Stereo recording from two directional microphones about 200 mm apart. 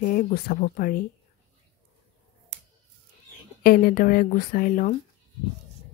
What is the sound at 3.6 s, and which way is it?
Speech, 45° left (ahead or behind).